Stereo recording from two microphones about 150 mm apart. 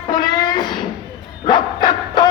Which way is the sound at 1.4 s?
30° left (ahead or behind).